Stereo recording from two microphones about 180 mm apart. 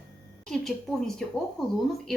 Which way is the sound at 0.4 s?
5° left (ahead or behind).